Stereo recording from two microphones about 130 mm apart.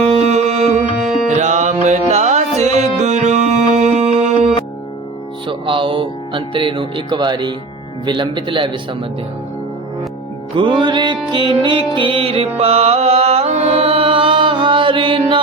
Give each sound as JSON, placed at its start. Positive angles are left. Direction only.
{"t": 0.0, "sound": "music", "side_deg": -55}
{"t": 5.5, "sound": "speech", "side_deg": -40}
{"t": 10.6, "sound": "speech", "side_deg": -40}
{"t": 11.9, "sound": "music", "side_deg": -45}